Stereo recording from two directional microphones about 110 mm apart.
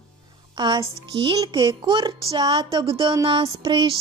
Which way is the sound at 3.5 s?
45° right (ahead or behind).